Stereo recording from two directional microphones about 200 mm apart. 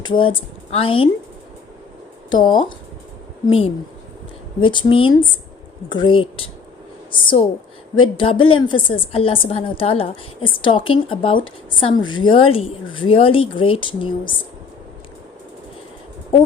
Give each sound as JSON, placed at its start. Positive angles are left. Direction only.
{"t": 0.0, "sound": "a woman's voice", "side_deg": 25}
{"t": 2.3, "sound": "a woman's voice", "side_deg": 20}
{"t": 4.6, "sound": "a woman's voice", "side_deg": 25}